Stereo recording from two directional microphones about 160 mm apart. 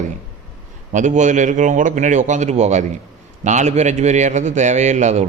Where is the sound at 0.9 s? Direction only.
50° right (ahead or behind).